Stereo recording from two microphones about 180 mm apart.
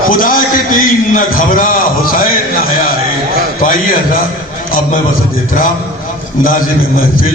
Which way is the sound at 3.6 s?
50° left (ahead or behind).